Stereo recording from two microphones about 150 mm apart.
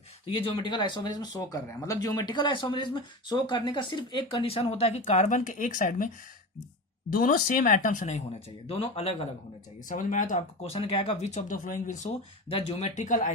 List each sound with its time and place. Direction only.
0.3 s speech: 35° left (ahead or behind); by 6.1 s 60° left (ahead or behind)
7.1 s speech: 70° left (ahead or behind); by 9.2 s 40° left (ahead or behind)
9.9 s speech: 60° left (ahead or behind); by 11.2 s 35° left (ahead or behind)
11.3 s speech: 60° left (ahead or behind)
12.5 s speech: 35° left (ahead or behind)
12.9 s speech: 55° left (ahead or behind)